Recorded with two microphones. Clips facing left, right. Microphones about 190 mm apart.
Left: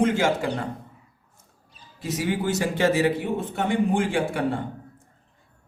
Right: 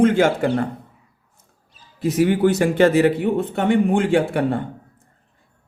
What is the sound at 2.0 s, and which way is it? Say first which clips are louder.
A man's voice: right 9 dB; 60° right (ahead or behind).